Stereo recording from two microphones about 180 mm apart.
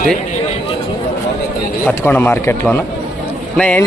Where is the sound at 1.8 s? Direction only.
10° left (ahead or behind).